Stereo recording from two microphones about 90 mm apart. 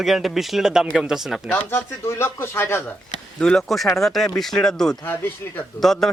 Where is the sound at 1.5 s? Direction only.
25° left (ahead or behind).